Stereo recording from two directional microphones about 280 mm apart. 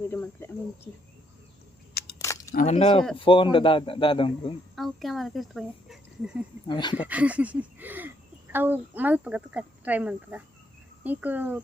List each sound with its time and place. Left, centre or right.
0.1 s speech: centre
1.9 s a sound: left
2.1 s a sound: centre
2.5 s a man's voice: left
4.7 s speech: centre
6.7 s speech: centre
7.0 s speech: centre